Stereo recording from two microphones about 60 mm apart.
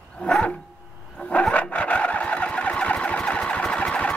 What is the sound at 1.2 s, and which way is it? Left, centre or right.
Vehicle, centre.